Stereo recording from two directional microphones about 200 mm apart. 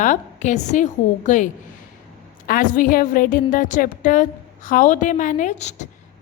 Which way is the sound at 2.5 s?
45° left (ahead or behind).